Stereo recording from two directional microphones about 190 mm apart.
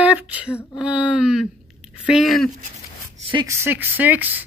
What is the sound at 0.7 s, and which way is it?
Speech, 5° right (ahead or behind).